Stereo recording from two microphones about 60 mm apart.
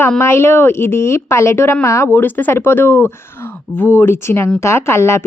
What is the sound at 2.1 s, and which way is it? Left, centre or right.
Speech, left.